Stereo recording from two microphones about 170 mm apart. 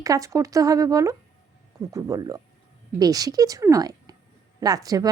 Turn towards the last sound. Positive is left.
turn(degrees=-20)  # may be behind; listen again after turning